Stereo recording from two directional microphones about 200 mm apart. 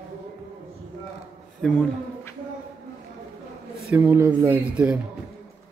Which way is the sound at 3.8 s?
10° right (ahead or behind).